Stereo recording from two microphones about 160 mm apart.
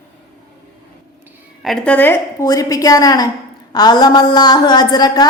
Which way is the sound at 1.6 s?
5° left (ahead or behind).